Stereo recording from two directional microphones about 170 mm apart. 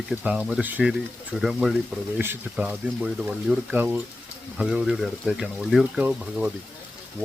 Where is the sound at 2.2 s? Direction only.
10° right (ahead or behind).